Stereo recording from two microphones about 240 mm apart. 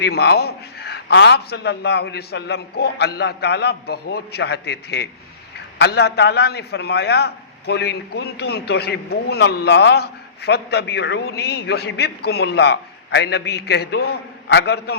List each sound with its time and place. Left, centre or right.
0.0 s a man's voice: left